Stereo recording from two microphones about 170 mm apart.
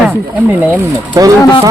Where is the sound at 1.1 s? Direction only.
20° right (ahead or behind).